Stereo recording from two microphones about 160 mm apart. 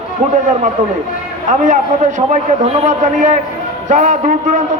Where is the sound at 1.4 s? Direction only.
50° right (ahead or behind).